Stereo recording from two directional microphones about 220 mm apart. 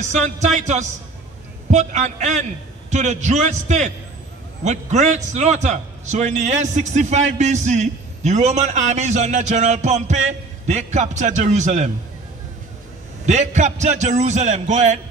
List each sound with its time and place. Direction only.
0.0 s a man's voice: 35° right (ahead or behind)
13.2 s a man's voice: 30° right (ahead or behind)